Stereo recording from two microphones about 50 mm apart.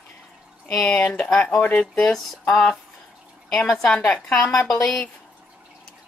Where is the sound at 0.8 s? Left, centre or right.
Left.